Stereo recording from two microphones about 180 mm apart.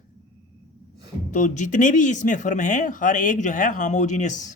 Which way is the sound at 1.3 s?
45° left (ahead or behind).